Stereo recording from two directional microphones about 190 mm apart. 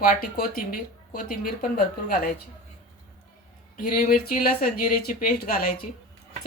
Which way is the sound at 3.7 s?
50° left (ahead or behind).